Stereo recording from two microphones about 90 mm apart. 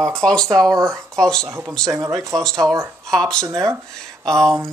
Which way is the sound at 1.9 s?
35° right (ahead or behind).